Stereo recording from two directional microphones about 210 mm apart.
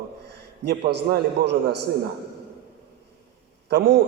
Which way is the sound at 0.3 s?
55° right (ahead or behind).